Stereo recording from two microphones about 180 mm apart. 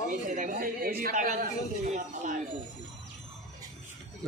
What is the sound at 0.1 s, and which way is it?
Speech, 45° right (ahead or behind).